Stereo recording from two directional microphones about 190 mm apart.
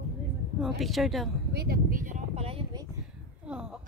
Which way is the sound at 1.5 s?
55° right (ahead or behind).